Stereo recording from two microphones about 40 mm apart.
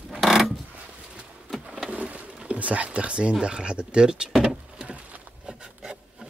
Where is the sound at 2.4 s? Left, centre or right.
Right.